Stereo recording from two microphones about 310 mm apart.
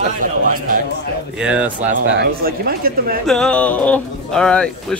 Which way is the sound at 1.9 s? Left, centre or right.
Right.